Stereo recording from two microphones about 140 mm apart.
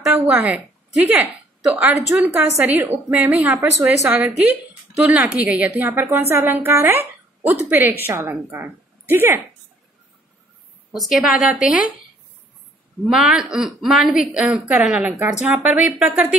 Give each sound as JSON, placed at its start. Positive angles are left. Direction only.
{"t": 0.1, "sound": "a woman's voice", "side_deg": -10}
{"t": 10.9, "sound": "a woman's voice", "side_deg": 0}
{"t": 13.1, "sound": "a woman's voice", "side_deg": -5}